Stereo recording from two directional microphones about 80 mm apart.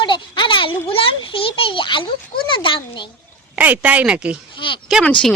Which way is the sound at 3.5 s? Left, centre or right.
Centre.